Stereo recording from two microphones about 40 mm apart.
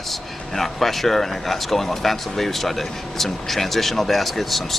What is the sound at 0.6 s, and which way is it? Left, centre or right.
Speech, centre.